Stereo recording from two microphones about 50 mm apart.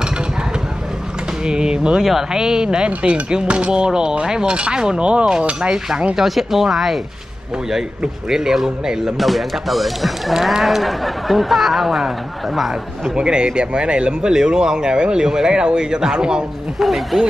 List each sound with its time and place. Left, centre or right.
1.4 s speech: centre
5.5 s cutlery: right
6.1 s speech: centre
8.3 s speech: centre
9.2 s speech: centre
13.1 s speech: centre
16.8 s speech: centre